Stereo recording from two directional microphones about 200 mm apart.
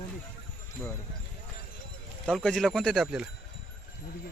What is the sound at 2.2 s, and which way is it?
Speech, 5° left (ahead or behind).